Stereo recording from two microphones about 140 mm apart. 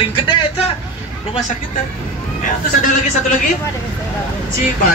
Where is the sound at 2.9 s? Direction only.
65° left (ahead or behind).